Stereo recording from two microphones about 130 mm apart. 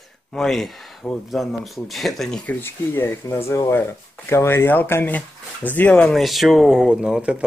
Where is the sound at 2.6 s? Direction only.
15° left (ahead or behind).